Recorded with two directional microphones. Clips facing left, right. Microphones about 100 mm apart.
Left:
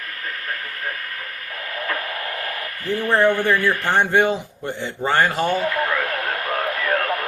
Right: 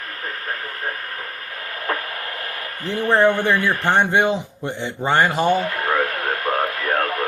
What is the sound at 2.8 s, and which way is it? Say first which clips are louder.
A man's voice: right 1 dB; 20° right (ahead or behind).